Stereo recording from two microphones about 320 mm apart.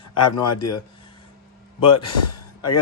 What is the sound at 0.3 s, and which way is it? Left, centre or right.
Speech, left.